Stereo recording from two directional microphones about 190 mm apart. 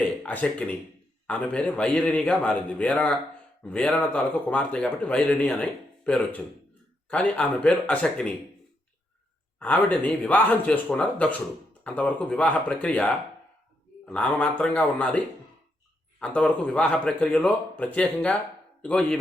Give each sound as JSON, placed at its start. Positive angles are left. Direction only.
{"t": 0.2, "sound": "a man's voice", "side_deg": 5}
{"t": 9.6, "sound": "a man's voice", "side_deg": 10}
{"t": 16.2, "sound": "a man's voice", "side_deg": 5}